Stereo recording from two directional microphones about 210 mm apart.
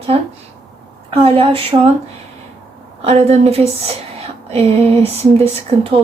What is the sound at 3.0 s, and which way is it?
Speech, 30° right (ahead or behind).